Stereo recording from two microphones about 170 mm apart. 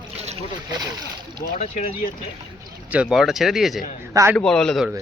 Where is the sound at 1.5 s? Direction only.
50° left (ahead or behind).